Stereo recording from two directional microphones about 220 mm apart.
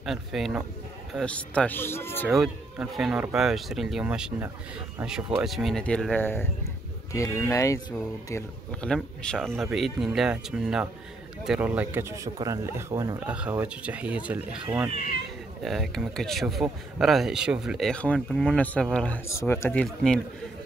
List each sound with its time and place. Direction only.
0.0 s speech: centre (ahead or behind)
2.2 s speech: centre (ahead or behind)